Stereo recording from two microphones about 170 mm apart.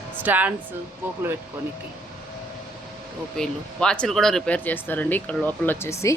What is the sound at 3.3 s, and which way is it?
Speech, 5° left (ahead or behind).